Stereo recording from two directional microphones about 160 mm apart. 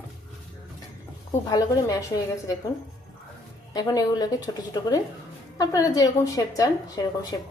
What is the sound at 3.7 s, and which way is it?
A woman's voice, 25° left (ahead or behind).